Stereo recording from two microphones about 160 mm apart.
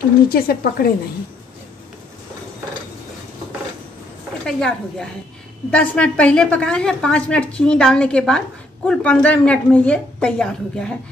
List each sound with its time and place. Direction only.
0.3 s speech: 70° left (ahead or behind)
4.5 s a woman's voice: 5° left (ahead or behind)